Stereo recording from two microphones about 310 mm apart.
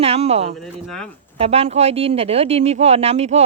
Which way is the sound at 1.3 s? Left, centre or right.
Centre.